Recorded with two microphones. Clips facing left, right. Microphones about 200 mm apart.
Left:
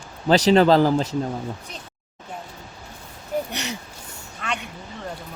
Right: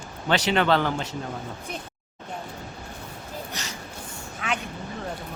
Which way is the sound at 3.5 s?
65° left (ahead or behind).